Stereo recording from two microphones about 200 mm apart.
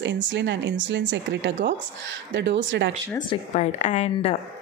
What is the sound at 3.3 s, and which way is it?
A woman's voice, 35° left (ahead or behind).